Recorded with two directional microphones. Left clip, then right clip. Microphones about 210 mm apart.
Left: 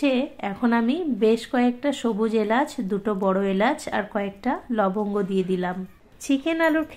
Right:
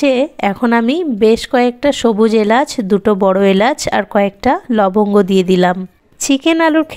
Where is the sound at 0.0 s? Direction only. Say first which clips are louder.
Right 11 dB; 45° right (ahead or behind).